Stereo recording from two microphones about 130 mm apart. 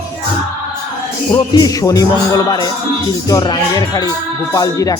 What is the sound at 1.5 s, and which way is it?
Speech, 25° left (ahead or behind).